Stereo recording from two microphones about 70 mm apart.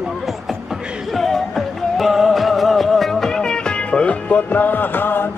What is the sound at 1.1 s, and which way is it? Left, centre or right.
Music, centre.